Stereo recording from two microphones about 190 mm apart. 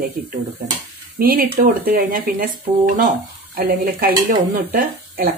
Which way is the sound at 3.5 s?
50° right (ahead or behind).